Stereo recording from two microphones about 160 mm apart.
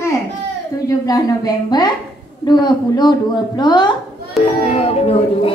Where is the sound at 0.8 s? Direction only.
20° left (ahead or behind).